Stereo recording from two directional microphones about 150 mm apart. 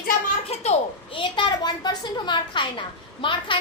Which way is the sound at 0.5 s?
45° left (ahead or behind).